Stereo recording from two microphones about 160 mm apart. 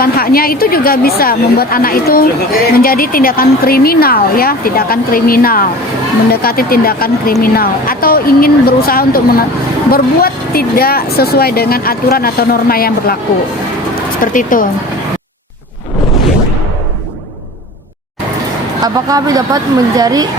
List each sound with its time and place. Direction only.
0.0 s speech: 70° left (ahead or behind)
14.2 s speech: 60° left (ahead or behind)
18.8 s speech: 20° right (ahead or behind)